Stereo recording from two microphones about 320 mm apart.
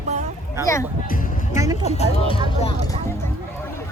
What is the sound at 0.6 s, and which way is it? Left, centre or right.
Speech, centre.